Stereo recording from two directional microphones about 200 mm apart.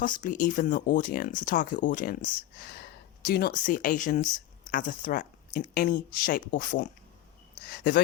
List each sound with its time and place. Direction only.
0.2 s a woman's voice: 40° left (ahead or behind)